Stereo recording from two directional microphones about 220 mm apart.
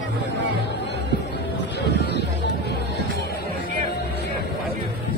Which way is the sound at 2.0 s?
50° left (ahead or behind).